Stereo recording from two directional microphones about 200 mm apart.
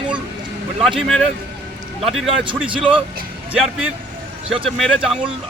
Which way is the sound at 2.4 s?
25° right (ahead or behind).